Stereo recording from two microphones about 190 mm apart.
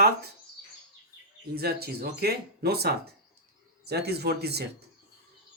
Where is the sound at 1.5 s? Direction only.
55° right (ahead or behind).